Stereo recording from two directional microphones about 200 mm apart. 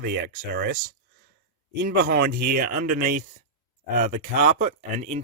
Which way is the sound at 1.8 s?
50° right (ahead or behind).